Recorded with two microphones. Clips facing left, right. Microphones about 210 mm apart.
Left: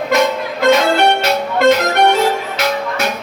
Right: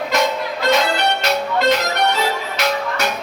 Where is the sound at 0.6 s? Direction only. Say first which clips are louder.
Left 6 dB; 50° left (ahead or behind).